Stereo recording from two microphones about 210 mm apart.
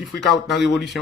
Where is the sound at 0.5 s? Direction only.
55° left (ahead or behind).